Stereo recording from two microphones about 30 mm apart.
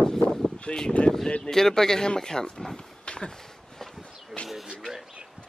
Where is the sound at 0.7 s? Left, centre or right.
Left.